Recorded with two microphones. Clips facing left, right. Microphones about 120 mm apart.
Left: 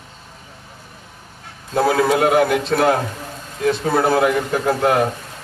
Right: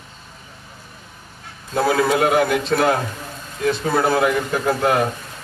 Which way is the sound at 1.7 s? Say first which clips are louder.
Left 1 dB; 40° left (ahead or behind).